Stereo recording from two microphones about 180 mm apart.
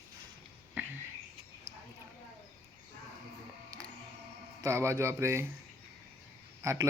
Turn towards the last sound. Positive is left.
turn(degrees=-15)  # may be behind; listen again after turning